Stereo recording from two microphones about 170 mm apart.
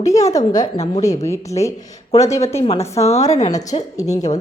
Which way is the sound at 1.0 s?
20° left (ahead or behind).